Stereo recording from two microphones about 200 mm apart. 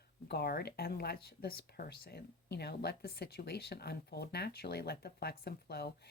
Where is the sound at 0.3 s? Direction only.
55° left (ahead or behind).